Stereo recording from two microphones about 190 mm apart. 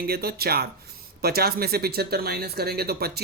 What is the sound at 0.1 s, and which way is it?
Speech, 55° right (ahead or behind).